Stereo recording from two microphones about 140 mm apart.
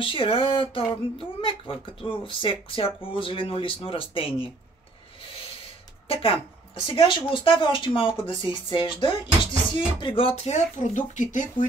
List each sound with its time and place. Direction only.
0.0 s speech: 40° left (ahead or behind)
6.0 s speech: 40° left (ahead or behind); by 11.6 s 65° left (ahead or behind)